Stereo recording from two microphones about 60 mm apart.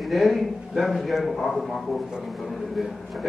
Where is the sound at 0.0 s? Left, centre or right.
Centre.